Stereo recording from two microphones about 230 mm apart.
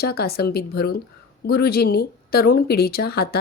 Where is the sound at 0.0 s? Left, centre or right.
Left.